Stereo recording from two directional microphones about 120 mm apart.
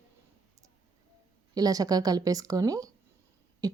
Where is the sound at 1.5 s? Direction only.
30° right (ahead or behind).